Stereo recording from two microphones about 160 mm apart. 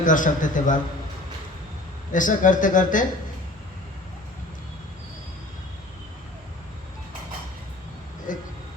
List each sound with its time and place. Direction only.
0.0 s speech: 55° left (ahead or behind)
2.1 s speech: 55° left (ahead or behind)
8.3 s a sound: 55° left (ahead or behind)